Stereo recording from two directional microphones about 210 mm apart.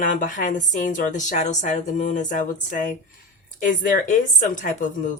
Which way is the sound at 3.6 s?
40° left (ahead or behind).